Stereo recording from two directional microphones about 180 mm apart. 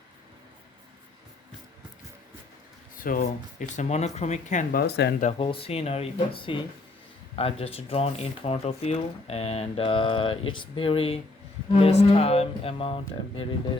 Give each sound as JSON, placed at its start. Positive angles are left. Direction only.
{"t": 3.0, "sound": "speech", "side_deg": 50}
{"t": 4.8, "sound": "speech", "side_deg": 65}
{"t": 5.4, "sound": "speech", "side_deg": 30}